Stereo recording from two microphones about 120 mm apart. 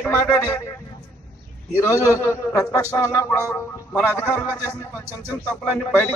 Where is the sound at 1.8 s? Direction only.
25° left (ahead or behind).